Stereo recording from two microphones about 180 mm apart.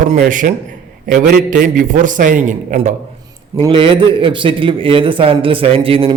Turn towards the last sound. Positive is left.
turn(degrees=-30)  # may be behind; listen again after turning